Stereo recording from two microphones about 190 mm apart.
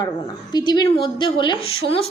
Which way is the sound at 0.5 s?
20° left (ahead or behind).